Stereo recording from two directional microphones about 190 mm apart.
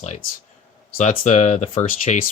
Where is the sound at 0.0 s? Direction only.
40° left (ahead or behind).